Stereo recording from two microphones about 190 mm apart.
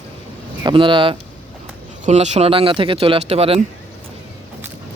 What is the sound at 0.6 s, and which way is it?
Speech, 25° right (ahead or behind).